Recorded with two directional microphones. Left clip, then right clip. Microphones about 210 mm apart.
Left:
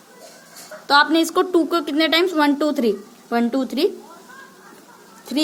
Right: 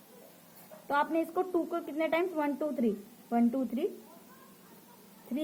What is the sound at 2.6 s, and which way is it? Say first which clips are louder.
A woman's voice: left 13 dB; 45° left (ahead or behind).